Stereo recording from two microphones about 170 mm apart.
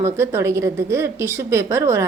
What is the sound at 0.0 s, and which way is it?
Speech, 15° right (ahead or behind).